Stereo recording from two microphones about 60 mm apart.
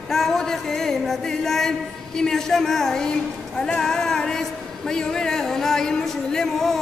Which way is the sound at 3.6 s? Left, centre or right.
Centre.